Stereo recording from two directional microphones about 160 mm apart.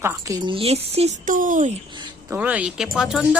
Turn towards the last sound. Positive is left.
turn(degrees=-5)  # may be behind; listen again after turning